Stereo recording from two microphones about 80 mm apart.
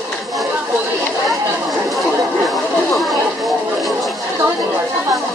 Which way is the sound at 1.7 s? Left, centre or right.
Centre.